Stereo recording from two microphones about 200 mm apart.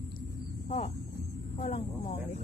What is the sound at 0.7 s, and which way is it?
Speech, 30° left (ahead or behind).